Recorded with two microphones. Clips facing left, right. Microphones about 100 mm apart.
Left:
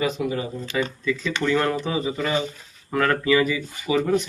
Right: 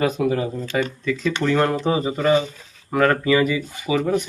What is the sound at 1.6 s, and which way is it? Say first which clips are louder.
Speech: right 4 dB; 30° right (ahead or behind).